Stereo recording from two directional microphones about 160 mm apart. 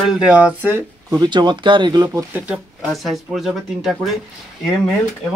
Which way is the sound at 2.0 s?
15° right (ahead or behind).